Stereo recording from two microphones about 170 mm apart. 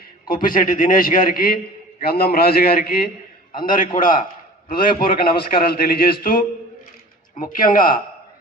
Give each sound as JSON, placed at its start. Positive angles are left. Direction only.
{"t": 0.5, "sound": "a man's voice", "side_deg": 55}
{"t": 3.8, "sound": "a man's voice", "side_deg": 50}
{"t": 7.5, "sound": "a man's voice", "side_deg": 55}